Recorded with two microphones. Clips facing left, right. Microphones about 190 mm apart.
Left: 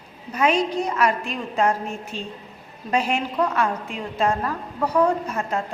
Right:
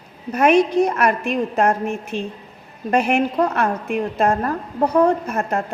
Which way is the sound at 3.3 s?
45° right (ahead or behind).